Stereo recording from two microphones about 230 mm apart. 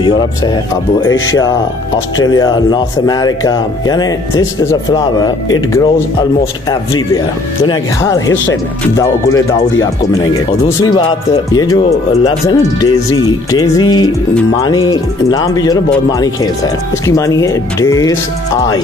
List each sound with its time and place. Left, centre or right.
1.0 s speech: left
2.1 s speech: centre
7.6 s speech: centre
17.0 s speech: centre